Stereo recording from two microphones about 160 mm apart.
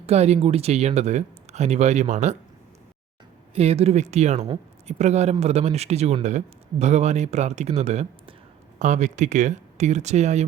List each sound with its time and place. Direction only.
0.0 s speech: 40° right (ahead or behind)
3.5 s speech: 40° right (ahead or behind)